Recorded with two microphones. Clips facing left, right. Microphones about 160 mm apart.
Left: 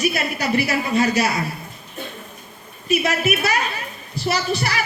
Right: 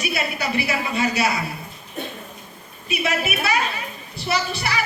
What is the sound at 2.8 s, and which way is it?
A woman's voice, 40° left (ahead or behind).